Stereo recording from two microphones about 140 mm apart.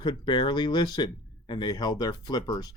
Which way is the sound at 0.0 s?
35° left (ahead or behind).